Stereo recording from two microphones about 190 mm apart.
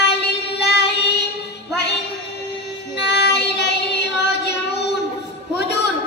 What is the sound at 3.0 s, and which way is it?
Child singing, 60° left (ahead or behind).